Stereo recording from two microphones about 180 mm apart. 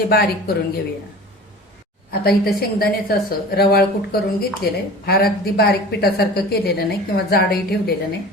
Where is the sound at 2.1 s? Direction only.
60° left (ahead or behind).